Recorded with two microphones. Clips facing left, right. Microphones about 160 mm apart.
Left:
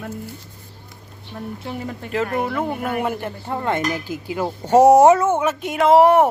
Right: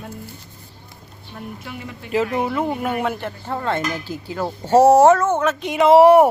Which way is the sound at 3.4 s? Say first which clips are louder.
Left 1 dB; 15° left (ahead or behind).